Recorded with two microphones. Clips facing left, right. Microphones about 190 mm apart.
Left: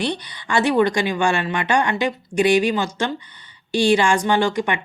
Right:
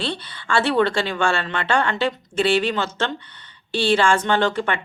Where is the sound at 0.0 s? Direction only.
15° left (ahead or behind).